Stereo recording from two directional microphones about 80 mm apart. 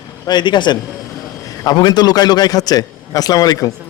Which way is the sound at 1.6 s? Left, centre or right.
Left.